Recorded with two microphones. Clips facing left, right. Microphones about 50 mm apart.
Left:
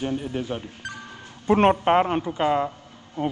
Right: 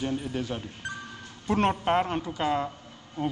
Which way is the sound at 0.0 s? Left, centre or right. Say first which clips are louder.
Left 3 dB; centre.